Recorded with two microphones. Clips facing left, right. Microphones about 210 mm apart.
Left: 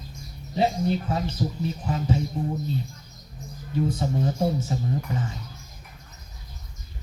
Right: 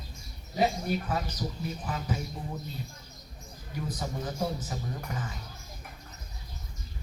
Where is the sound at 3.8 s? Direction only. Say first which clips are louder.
Left 8 dB; 25° left (ahead or behind).